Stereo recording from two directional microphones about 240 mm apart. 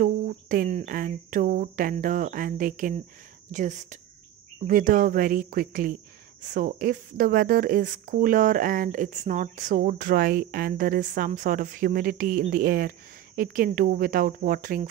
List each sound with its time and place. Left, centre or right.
0.0 s speech: right